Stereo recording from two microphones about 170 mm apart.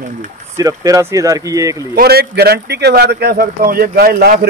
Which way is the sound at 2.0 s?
70° right (ahead or behind).